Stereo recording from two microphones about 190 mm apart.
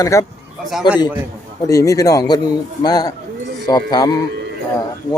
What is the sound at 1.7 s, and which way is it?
A man's voice, 15° left (ahead or behind).